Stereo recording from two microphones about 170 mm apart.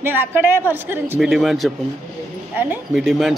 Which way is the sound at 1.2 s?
Centre (ahead or behind).